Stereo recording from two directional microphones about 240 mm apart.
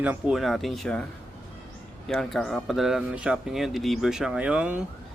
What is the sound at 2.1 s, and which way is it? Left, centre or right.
Speech, centre.